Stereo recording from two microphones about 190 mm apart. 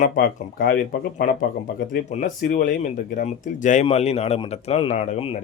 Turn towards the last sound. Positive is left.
turn(degrees=30)  # may be behind; listen again after turning